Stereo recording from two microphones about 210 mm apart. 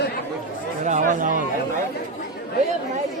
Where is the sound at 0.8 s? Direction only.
35° right (ahead or behind).